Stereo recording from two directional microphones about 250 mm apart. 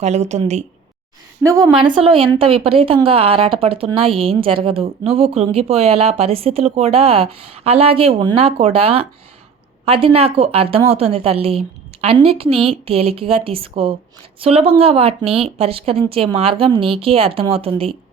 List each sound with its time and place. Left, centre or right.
0.0 s speech: right
1.4 s a woman's voice: centre